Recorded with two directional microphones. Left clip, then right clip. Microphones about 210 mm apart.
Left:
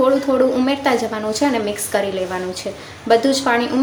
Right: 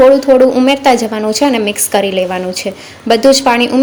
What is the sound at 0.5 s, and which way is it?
A woman's voice, 30° right (ahead or behind).